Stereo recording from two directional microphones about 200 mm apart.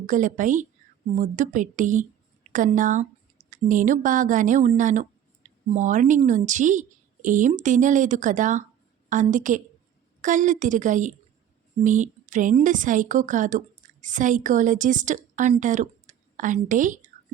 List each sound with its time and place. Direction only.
0.0 s a woman's voice: 40° right (ahead or behind)